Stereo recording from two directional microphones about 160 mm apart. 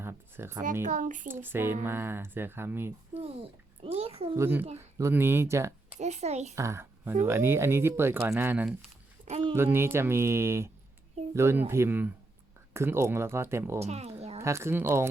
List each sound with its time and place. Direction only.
0.0 s a sound: 15° right (ahead or behind)
0.6 s speech: 55° right (ahead or behind)
1.3 s speech: 15° right (ahead or behind)
3.8 s a child's voice: 35° right (ahead or behind)
4.4 s speech: 15° right (ahead or behind)
6.0 s speech: 45° right (ahead or behind)
6.6 s speech: 15° right (ahead or behind)
9.3 s a child's voice: 30° right (ahead or behind)
9.6 s speech: 15° right (ahead or behind)
13.7 s speech: 40° right (ahead or behind)
14.3 s speech: 15° right (ahead or behind)